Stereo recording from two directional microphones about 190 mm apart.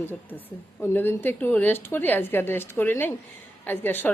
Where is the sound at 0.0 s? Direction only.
10° left (ahead or behind).